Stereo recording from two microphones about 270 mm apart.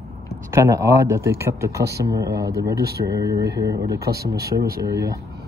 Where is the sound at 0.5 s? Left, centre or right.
Centre.